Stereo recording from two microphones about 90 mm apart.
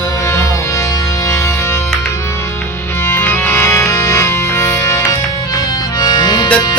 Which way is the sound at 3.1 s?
25° left (ahead or behind).